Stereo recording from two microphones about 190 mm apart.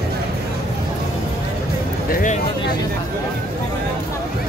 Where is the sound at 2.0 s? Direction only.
50° left (ahead or behind).